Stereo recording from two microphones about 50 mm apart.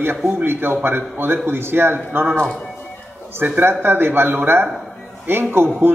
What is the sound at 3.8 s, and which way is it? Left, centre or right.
Speech, right.